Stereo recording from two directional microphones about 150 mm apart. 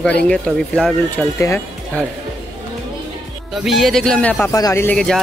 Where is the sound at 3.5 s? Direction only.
Centre (ahead or behind).